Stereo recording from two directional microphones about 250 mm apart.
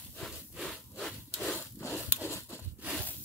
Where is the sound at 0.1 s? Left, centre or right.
Centre.